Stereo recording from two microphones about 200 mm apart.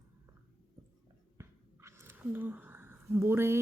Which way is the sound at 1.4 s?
15° right (ahead or behind).